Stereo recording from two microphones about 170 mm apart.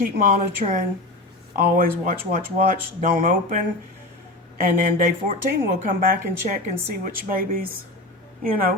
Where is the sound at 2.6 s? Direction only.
55° right (ahead or behind).